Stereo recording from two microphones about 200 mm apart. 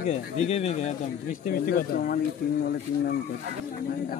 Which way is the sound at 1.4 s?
45° left (ahead or behind).